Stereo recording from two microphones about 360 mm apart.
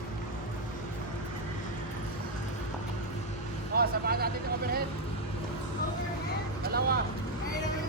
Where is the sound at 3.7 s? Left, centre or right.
Right.